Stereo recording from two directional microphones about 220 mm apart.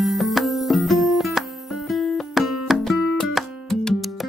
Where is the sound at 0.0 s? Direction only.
Centre (ahead or behind).